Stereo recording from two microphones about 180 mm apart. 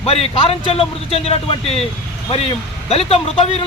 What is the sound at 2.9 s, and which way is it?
Speech, 35° left (ahead or behind).